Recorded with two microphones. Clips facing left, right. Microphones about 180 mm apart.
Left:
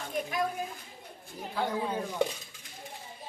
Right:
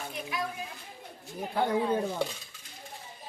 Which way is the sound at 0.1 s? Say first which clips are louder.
Left 7 dB; 45° left (ahead or behind).